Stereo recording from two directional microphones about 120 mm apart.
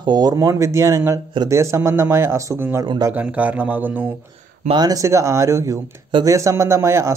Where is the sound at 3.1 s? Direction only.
10° right (ahead or behind).